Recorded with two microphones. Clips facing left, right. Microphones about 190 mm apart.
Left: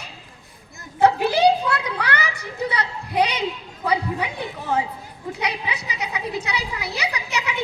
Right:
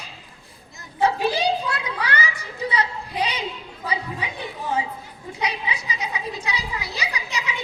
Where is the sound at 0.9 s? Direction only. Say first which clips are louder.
Left 4 dB; 65° left (ahead or behind).